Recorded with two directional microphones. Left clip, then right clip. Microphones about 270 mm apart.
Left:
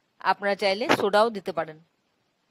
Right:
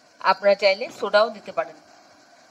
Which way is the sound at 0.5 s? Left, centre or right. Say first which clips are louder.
Right 4 dB; left.